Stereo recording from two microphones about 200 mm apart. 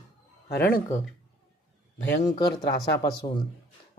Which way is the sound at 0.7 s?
35° left (ahead or behind).